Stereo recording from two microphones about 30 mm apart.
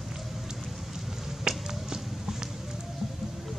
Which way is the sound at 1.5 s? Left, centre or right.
Right.